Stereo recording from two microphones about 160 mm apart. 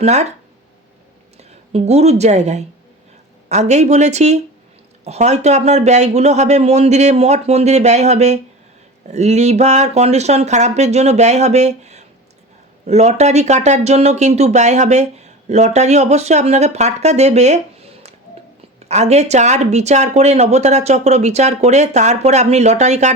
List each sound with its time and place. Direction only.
0.0 s speech: 45° right (ahead or behind)
1.4 s speech: 40° right (ahead or behind)